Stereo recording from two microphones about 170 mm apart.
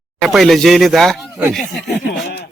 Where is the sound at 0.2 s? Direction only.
Centre (ahead or behind).